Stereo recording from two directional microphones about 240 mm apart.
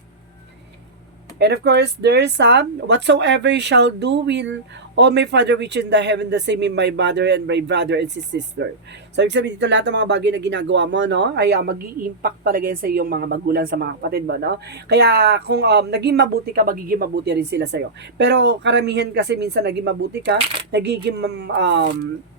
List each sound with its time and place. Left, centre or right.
1.4 s speech: right